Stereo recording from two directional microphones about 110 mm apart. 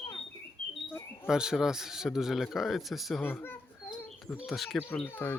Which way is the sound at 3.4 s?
20° left (ahead or behind).